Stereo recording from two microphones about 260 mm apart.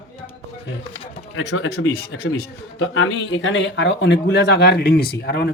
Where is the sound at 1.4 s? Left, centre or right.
Left.